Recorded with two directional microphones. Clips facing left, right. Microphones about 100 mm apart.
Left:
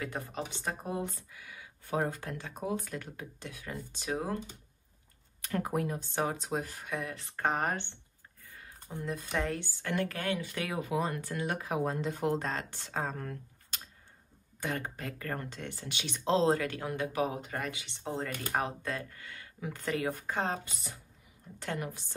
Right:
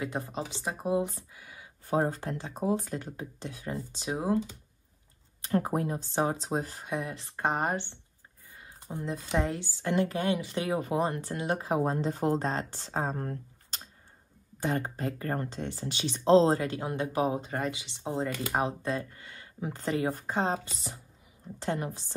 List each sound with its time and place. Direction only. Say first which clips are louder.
0.0 s speech: right 3 dB; 20° right (ahead or behind)
1.4 s a sound: even; 35° right (ahead or behind)
2.5 s speech: right 6 dB; 35° right (ahead or behind); by 4.4 s 15° right (ahead or behind)
5.5 s speech: right 4 dB; 30° right (ahead or behind)
8.5 s a sound: right 4 dB; 15° right (ahead or behind)
9.8 s speech: right 8 dB; 20° right (ahead or behind); by 12.4 s 40° right (ahead or behind)
12.7 s speech: right 4 dB; 25° right (ahead or behind)
14.7 s speech: right 6 dB; 20° right (ahead or behind)